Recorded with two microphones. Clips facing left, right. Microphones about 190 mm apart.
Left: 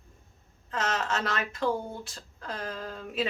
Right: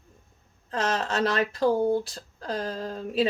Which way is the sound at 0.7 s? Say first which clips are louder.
Right 3 dB; 35° right (ahead or behind).